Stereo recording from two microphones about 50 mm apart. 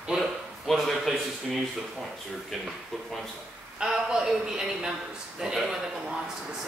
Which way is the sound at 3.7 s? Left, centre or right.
Centre.